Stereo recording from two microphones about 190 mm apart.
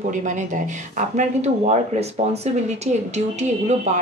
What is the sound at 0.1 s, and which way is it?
Speech, 40° right (ahead or behind).